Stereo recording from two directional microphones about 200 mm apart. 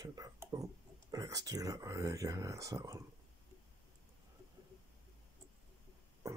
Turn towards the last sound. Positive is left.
turn(degrees=-15)  # may be behind; listen again after turning